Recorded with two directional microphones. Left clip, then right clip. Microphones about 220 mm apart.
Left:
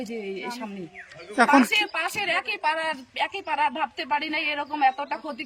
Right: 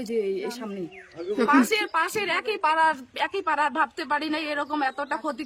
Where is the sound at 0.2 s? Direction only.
10° right (ahead or behind).